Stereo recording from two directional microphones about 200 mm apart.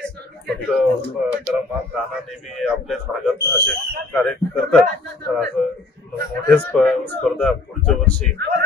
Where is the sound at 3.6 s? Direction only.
55° right (ahead or behind).